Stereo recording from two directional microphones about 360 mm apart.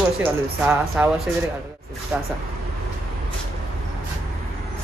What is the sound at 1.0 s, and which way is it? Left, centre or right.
Speech, centre.